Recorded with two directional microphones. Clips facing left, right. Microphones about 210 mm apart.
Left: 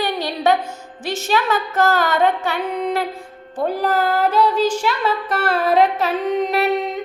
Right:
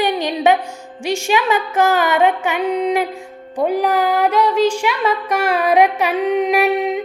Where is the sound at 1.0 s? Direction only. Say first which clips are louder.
Right 3 dB; 15° right (ahead or behind).